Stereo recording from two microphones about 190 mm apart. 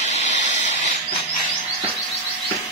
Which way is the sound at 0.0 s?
40° left (ahead or behind).